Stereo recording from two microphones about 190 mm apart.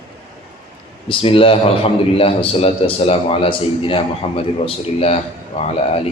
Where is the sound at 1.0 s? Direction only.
30° left (ahead or behind).